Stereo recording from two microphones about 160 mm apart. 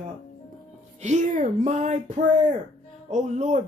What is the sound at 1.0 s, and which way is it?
Speech, 50° right (ahead or behind).